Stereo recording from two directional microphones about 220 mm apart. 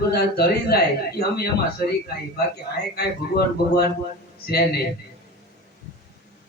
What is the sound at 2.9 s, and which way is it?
A man's voice, 45° left (ahead or behind).